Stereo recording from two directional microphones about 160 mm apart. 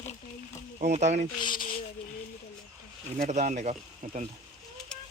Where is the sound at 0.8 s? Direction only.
45° right (ahead or behind).